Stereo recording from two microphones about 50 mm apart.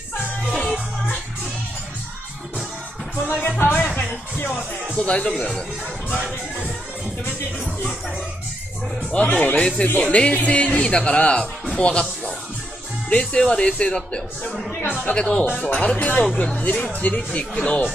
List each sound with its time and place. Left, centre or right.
0.5 s music: centre
3.3 s music: left
3.8 s music: left
4.6 s speech: centre
9.1 s speech: left
13.1 s speech: left